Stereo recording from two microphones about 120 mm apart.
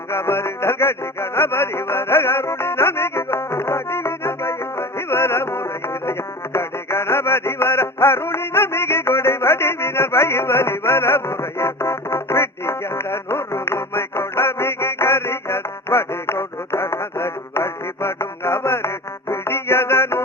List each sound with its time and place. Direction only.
0.1 s music: 20° left (ahead or behind)